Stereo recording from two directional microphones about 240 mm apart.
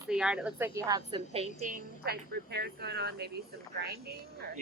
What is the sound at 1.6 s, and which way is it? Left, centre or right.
Speech, right.